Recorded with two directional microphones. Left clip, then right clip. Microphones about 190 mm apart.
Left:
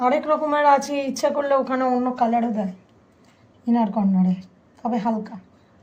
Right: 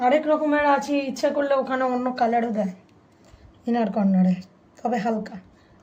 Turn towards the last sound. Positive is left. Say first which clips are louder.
# even
turn(degrees=-30)  # may be behind; listen again after turning